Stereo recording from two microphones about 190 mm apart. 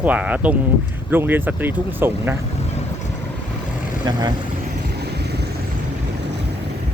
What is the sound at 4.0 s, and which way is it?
Speech, 20° right (ahead or behind).